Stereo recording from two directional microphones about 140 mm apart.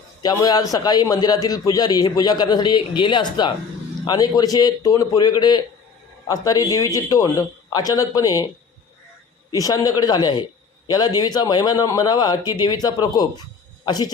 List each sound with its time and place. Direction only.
0.2 s a man's voice: 30° left (ahead or behind)
9.5 s a man's voice: 25° left (ahead or behind)